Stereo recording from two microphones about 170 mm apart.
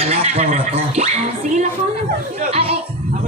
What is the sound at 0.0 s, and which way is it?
Speech, 35° right (ahead or behind).